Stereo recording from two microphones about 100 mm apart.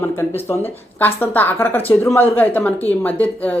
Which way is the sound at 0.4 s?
20° left (ahead or behind).